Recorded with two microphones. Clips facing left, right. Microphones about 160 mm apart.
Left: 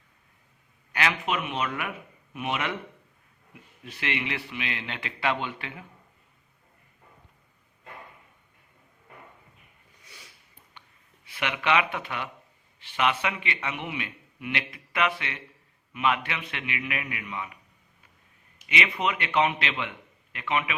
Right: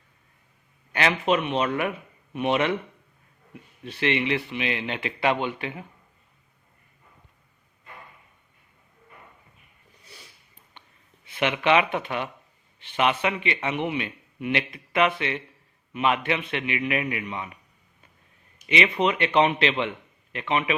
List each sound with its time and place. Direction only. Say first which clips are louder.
0.9 s speech: right 5 dB; 30° right (ahead or behind)
3.8 s a man's voice: right 7 dB; 30° right (ahead or behind)
10.8 s a sound: right 1 dB; 25° right (ahead or behind)
11.3 s a man's voice: right 5 dB; 25° right (ahead or behind)
18.7 s a man's voice: right 5 dB; 25° right (ahead or behind)